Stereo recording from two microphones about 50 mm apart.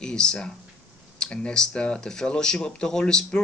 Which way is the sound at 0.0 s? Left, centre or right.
Centre.